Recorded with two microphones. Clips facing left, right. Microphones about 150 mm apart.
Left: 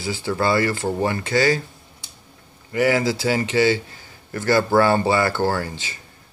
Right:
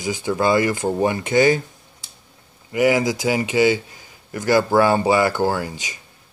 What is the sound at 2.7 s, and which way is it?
A man's voice, 15° right (ahead or behind).